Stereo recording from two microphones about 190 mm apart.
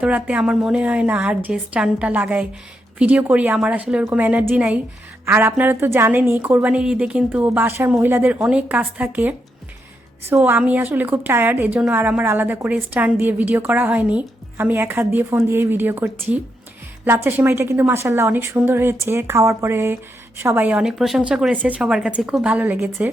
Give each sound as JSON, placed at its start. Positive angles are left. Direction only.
{"t": 0.0, "sound": "a woman's voice", "side_deg": -5}
{"t": 17.2, "sound": "a woman's voice", "side_deg": -10}